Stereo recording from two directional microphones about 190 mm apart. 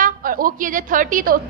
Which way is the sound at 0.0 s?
45° right (ahead or behind).